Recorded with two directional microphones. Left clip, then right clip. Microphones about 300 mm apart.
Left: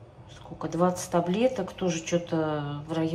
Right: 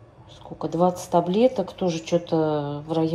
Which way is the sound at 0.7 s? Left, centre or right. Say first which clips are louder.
Right 5 dB; centre.